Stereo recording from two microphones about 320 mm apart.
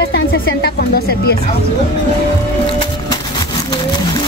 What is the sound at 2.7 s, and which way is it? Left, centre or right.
Music, centre.